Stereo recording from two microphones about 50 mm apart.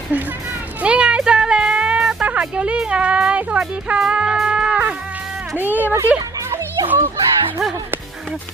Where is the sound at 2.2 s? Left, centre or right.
Right.